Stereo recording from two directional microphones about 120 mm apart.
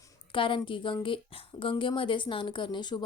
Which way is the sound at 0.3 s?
45° left (ahead or behind).